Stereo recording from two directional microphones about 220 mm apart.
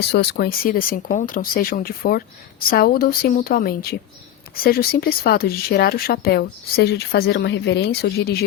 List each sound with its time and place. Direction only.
0.1 s speech: 45° left (ahead or behind)